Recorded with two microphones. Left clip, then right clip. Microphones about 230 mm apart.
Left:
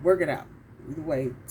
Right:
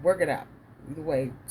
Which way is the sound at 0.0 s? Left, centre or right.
Right.